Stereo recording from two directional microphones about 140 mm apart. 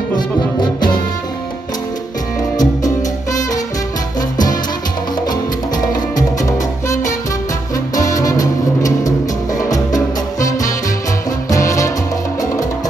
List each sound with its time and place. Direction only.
0.1 s music: 30° left (ahead or behind)
2.5 s music: 25° left (ahead or behind)
6.1 s music: 25° left (ahead or behind)